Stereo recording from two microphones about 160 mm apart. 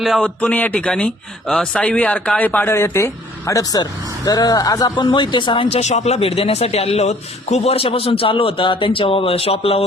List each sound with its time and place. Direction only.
0.0 s speech: centre (ahead or behind); by 5.6 s 30° left (ahead or behind)
5.7 s a man's voice: 45° left (ahead or behind)